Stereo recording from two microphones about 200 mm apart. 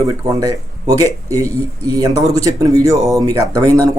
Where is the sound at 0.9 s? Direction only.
15° right (ahead or behind).